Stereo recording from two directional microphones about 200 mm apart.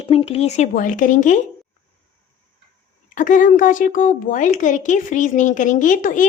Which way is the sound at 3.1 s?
40° left (ahead or behind).